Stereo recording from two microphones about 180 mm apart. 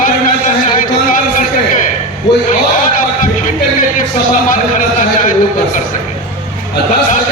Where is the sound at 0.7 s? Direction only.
50° left (ahead or behind).